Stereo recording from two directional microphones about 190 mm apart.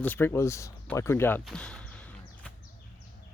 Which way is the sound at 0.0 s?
10° left (ahead or behind).